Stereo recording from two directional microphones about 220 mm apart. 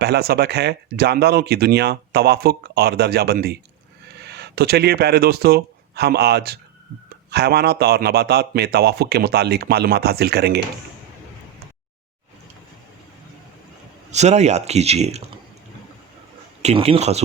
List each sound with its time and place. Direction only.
0.0 s speech: 50° right (ahead or behind)
14.1 s speech: 30° right (ahead or behind)
16.6 s speech: 25° right (ahead or behind)